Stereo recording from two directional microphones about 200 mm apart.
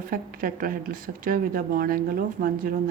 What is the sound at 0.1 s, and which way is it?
Speech, 45° right (ahead or behind).